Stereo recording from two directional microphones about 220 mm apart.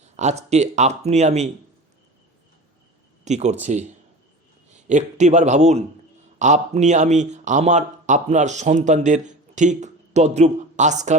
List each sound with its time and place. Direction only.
0.2 s speech: 30° right (ahead or behind)
3.2 s speech: 30° right (ahead or behind)
4.9 s speech: 30° right (ahead or behind)